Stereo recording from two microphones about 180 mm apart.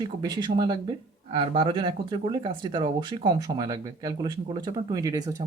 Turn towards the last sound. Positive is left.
turn(degrees=-20)  # may be behind; listen again after turning